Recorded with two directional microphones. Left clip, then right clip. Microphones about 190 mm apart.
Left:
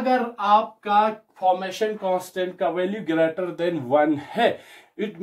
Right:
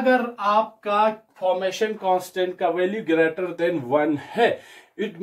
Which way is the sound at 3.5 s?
30° left (ahead or behind).